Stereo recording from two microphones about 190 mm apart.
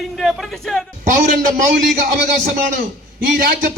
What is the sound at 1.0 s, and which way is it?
Speech, 45° right (ahead or behind).